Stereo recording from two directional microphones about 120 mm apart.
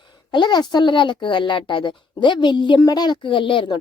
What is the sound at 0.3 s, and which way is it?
A woman's voice, 40° left (ahead or behind).